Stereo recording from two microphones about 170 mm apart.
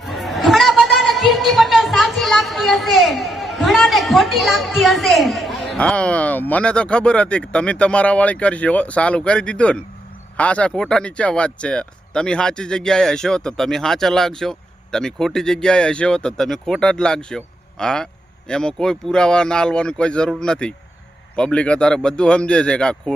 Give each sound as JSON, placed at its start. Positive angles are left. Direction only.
{"t": 0.0, "sound": "a woman's voice", "side_deg": 0}